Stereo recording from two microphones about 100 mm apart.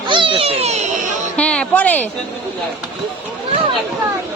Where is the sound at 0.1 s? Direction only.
60° right (ahead or behind); by 0.9 s 90° right.